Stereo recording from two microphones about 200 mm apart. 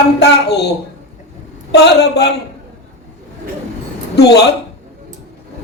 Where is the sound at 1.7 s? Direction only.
55° left (ahead or behind).